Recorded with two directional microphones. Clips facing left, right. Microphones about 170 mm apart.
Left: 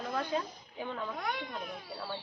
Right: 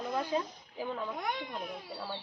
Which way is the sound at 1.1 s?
20° right (ahead or behind).